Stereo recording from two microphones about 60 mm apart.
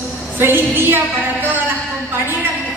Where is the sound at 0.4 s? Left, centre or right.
Right.